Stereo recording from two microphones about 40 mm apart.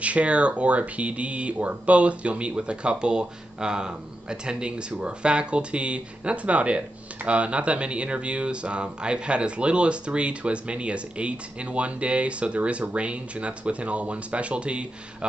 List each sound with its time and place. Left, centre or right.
0.0 s speech: right